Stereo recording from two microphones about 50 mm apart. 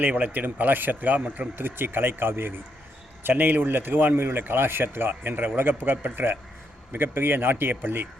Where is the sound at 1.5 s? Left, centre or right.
Right.